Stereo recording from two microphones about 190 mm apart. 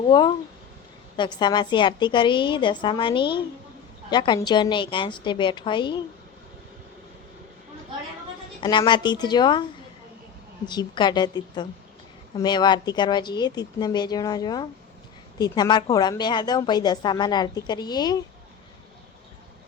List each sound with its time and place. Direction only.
0.1 s a woman's voice: 25° left (ahead or behind)
8.6 s a woman's voice: 25° left (ahead or behind)
10.7 s a woman's voice: 25° left (ahead or behind)